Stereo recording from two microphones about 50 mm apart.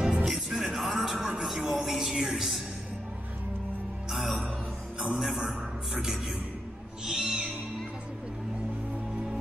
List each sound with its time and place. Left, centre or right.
0.0 s music: centre
0.3 s music: centre
4.1 s music: centre
5.0 s music: centre
7.1 s owl: centre